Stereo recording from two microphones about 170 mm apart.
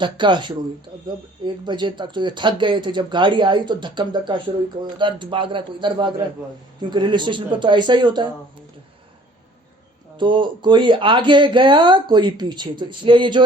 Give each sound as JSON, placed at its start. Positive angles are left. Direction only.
{"t": 0.0, "sound": "speech", "side_deg": -30}
{"t": 1.6, "sound": "speech", "side_deg": -25}
{"t": 10.2, "sound": "speech", "side_deg": -30}